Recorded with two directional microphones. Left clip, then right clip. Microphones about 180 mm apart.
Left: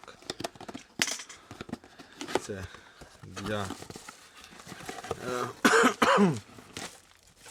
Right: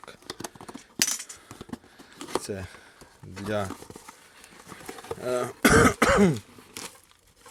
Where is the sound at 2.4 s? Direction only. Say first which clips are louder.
Right 4 dB; 15° right (ahead or behind).